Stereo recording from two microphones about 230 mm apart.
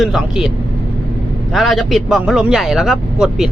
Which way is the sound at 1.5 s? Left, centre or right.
Centre.